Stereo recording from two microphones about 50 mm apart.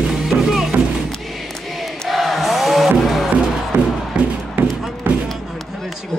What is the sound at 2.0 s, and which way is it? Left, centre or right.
Music, centre.